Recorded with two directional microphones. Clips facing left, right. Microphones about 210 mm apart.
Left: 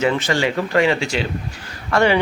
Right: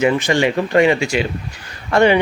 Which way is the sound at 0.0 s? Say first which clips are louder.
Right 3 dB; 15° right (ahead or behind).